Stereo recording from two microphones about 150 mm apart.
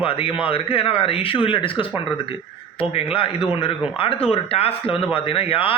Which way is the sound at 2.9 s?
40° left (ahead or behind).